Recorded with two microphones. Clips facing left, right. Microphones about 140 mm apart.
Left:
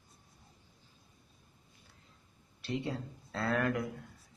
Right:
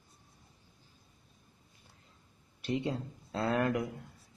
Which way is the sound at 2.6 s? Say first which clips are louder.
Right 3 dB; 20° right (ahead or behind).